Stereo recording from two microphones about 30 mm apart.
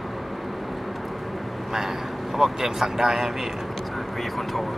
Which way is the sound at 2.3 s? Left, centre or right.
Centre.